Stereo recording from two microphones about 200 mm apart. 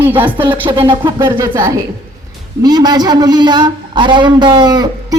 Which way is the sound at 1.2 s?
15° right (ahead or behind).